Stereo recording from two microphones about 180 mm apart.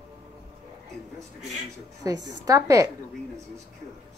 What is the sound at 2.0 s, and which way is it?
Speech, 20° right (ahead or behind).